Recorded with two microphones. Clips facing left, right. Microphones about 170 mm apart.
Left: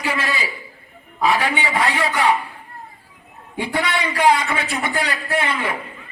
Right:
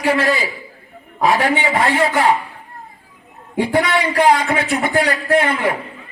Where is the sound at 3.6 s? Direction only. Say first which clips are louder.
Right 6 dB; 40° right (ahead or behind).